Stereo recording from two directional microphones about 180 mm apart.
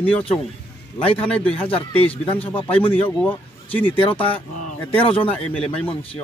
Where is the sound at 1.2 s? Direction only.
5° left (ahead or behind).